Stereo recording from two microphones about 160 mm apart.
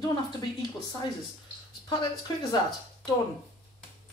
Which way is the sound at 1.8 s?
25° left (ahead or behind).